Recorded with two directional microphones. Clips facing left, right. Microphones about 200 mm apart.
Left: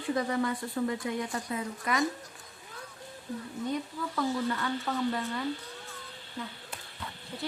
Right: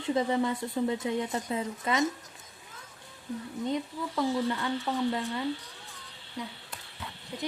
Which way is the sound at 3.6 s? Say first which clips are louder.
Right 2 dB; 20° right (ahead or behind).